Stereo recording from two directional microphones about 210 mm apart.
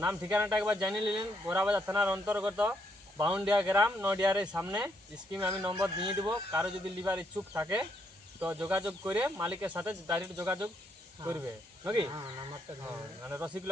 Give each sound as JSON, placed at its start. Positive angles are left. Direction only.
{"t": 0.0, "sound": "speech", "side_deg": -10}
{"t": 3.5, "sound": "speech", "side_deg": -15}
{"t": 4.8, "sound": "speech", "side_deg": -5}